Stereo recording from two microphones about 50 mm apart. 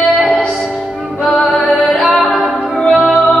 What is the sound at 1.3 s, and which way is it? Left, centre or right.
Music, centre.